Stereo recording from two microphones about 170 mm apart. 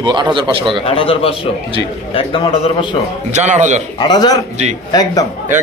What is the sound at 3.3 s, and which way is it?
Speech, 45° right (ahead or behind).